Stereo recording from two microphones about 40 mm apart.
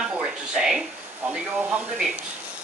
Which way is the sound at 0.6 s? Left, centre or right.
Centre.